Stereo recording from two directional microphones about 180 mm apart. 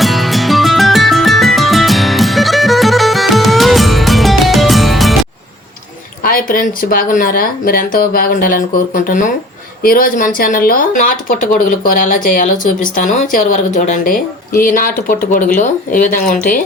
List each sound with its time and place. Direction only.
0.0 s music: centre (ahead or behind)
6.2 s speech: 50° left (ahead or behind)